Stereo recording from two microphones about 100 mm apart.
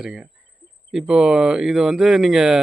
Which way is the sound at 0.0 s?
10° right (ahead or behind).